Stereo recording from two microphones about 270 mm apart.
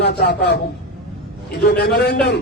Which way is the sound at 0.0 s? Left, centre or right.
Left.